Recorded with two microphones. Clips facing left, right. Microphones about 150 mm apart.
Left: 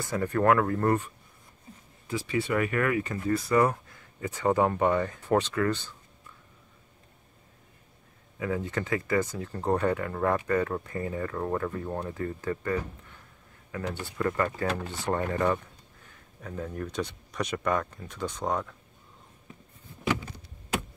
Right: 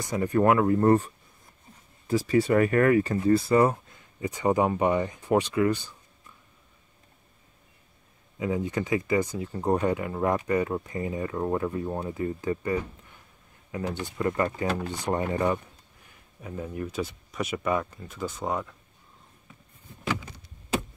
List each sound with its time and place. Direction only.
0.0 s speech: 15° right (ahead or behind)
2.0 s speech: 40° right (ahead or behind); by 5.9 s 15° right (ahead or behind)
8.4 s speech: 15° right (ahead or behind)